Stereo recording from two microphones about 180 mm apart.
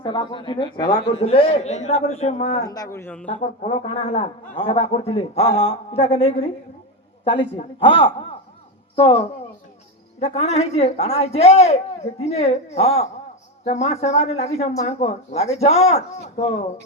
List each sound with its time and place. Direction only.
0.0 s a man's voice: 25° left (ahead or behind)
2.6 s speech: 20° left (ahead or behind)
3.2 s a man's voice: 40° left (ahead or behind)